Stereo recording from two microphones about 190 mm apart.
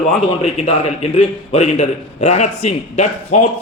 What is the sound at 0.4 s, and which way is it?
A man's voice, 35° left (ahead or behind).